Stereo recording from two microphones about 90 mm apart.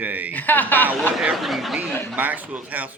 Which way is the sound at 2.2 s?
20° right (ahead or behind).